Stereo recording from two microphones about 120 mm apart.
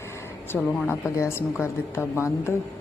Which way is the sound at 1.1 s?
25° left (ahead or behind).